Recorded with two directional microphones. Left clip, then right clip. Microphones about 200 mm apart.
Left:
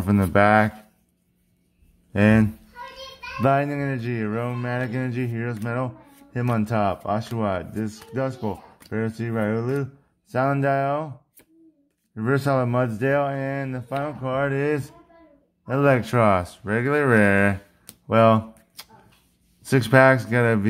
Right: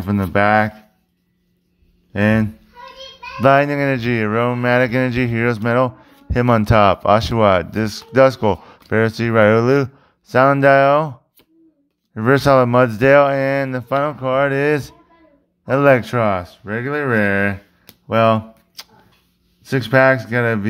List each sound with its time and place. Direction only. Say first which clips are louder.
0.0 s speech: right 2 dB; centre (ahead or behind)
2.1 s a sound: right 2 dB; centre (ahead or behind)
3.3 s speech: right 8 dB; 20° right (ahead or behind); by 9.8 s 35° right (ahead or behind)
10.2 s speech: right 10 dB; 20° right (ahead or behind); by 20.6 s centre (ahead or behind)